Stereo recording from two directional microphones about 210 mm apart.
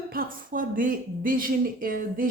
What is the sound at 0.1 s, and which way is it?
A woman's voice, 40° right (ahead or behind).